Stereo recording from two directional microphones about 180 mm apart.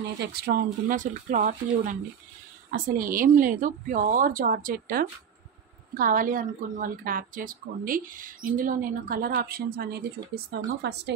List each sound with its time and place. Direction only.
0.2 s a woman's voice: 60° right (ahead or behind)
10.3 s speech: 65° right (ahead or behind)